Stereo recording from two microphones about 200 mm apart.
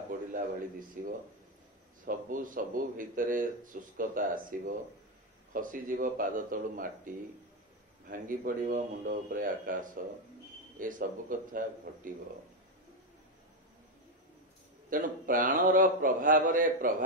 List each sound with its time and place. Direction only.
0.3 s a man's voice: 40° right (ahead or behind)
8.1 s a man's voice: 45° right (ahead or behind)
14.9 s a man's voice: 45° right (ahead or behind)